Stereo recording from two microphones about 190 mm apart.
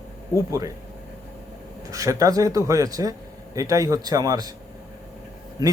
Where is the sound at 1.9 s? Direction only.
15° right (ahead or behind).